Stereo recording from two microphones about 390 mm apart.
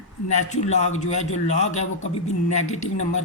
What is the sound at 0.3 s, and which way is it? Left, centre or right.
A man's voice, centre.